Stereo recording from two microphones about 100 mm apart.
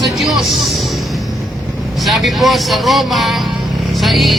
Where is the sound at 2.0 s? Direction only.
Centre (ahead or behind).